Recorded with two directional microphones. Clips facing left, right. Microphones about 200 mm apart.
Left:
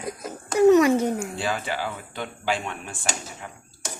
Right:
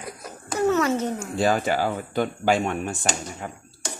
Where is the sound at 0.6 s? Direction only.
15° left (ahead or behind).